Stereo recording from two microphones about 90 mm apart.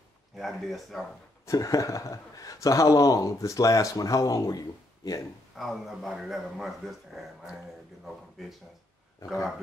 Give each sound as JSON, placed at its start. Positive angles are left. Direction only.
{"t": 0.4, "sound": "a man's voice", "side_deg": 0}
{"t": 1.4, "sound": "speech", "side_deg": 40}
{"t": 5.6, "sound": "a man's voice", "side_deg": 0}